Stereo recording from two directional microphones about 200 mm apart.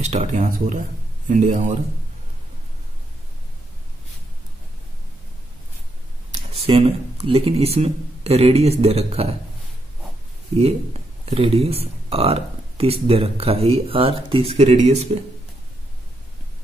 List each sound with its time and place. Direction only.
0.0 s speech: 35° right (ahead or behind)
6.3 s speech: 30° right (ahead or behind)
10.5 s speech: 30° right (ahead or behind)